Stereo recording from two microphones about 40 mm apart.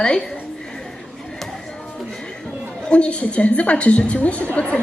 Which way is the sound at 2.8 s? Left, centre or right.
Left.